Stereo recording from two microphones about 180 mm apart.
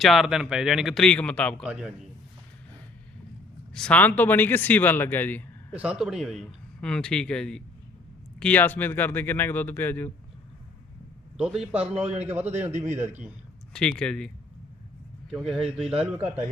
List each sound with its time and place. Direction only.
0.0 s a man's voice: centre (ahead or behind)
1.6 s a man's voice: 5° right (ahead or behind)
3.8 s speech: 5° left (ahead or behind)
5.7 s a man's voice: 5° right (ahead or behind); by 10.1 s 10° left (ahead or behind)
11.3 s a man's voice: 5° right (ahead or behind)
12.1 s a man's voice: 35° right (ahead or behind)
12.4 s speech: 10° right (ahead or behind)
12.7 s a man's voice: 40° right (ahead or behind)
13.0 s speech: 10° right (ahead or behind)
14.0 s a man's voice: 5° left (ahead or behind)
15.3 s a man's voice: centre (ahead or behind)